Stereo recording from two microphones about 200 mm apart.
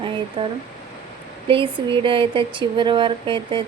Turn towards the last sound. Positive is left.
turn(degrees=-25)  # may be behind; listen again after turning